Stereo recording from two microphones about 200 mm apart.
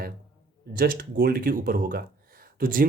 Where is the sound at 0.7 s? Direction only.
45° right (ahead or behind).